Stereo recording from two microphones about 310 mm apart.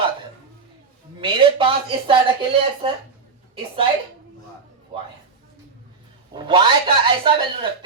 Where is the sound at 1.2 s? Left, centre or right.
Centre.